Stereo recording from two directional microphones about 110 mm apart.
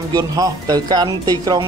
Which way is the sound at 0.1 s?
35° right (ahead or behind).